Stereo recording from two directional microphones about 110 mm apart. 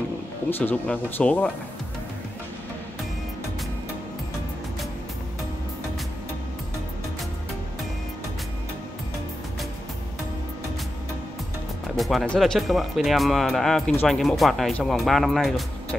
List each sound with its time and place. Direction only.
0.5 s speech: 15° left (ahead or behind)
12.0 s music: centre (ahead or behind)
12.4 s speech: centre (ahead or behind)